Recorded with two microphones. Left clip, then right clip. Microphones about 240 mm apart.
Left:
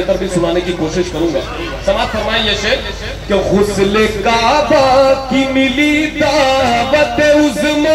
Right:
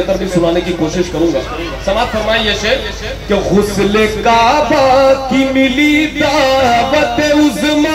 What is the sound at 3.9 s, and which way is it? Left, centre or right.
Music, right.